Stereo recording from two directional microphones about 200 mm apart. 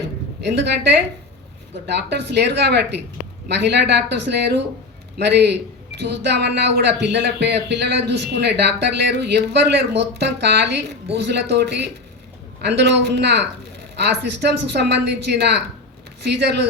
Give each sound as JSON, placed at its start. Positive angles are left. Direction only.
{"t": 0.4, "sound": "speech", "side_deg": -60}
{"t": 2.0, "sound": "speech", "side_deg": -55}